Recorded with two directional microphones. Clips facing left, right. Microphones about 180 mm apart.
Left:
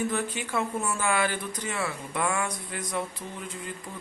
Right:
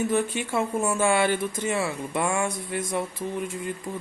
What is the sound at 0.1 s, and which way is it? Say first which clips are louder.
Speech: right 5 dB; 25° right (ahead or behind).